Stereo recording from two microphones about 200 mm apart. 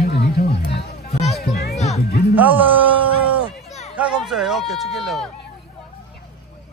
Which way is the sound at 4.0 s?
Centre (ahead or behind).